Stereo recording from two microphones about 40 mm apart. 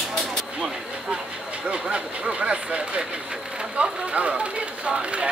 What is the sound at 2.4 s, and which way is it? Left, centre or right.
Speech, right.